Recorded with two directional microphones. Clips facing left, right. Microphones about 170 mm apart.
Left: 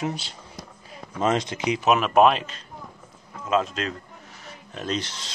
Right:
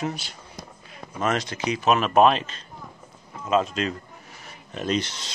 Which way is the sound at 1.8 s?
5° left (ahead or behind).